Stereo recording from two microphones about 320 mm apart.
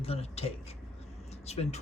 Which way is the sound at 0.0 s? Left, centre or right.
Centre.